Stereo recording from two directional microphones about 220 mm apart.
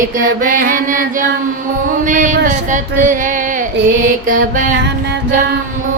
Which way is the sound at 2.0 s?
35° right (ahead or behind).